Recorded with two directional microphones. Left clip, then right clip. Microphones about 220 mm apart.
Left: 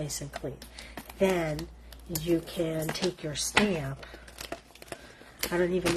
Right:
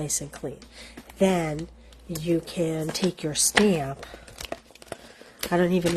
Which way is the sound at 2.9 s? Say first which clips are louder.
Right 5 dB; 45° right (ahead or behind).